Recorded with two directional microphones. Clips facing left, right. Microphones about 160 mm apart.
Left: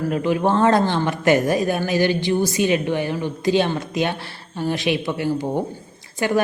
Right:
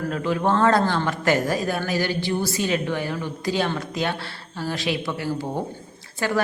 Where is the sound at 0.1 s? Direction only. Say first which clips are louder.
Left 2 dB; 15° left (ahead or behind).